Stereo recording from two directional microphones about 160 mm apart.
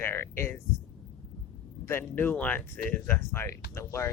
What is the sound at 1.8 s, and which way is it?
Speech, 15° left (ahead or behind).